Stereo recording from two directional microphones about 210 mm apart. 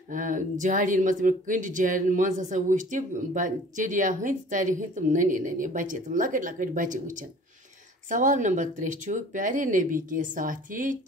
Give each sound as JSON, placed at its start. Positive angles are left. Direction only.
{"t": 0.1, "sound": "speech", "side_deg": -40}